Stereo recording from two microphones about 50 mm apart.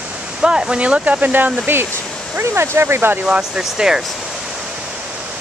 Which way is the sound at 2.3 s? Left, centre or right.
Right.